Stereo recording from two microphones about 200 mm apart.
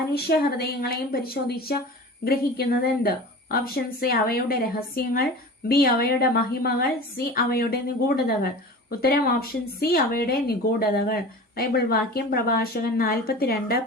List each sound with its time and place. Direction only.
0.1 s a woman's voice: 50° left (ahead or behind)